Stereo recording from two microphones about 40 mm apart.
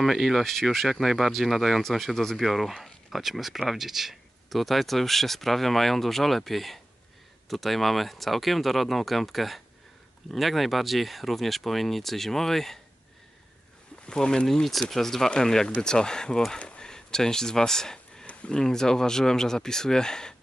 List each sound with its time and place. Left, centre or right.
0.0 s speech: centre
14.0 s speech: centre
18.2 s a sound: left
18.6 s speech: centre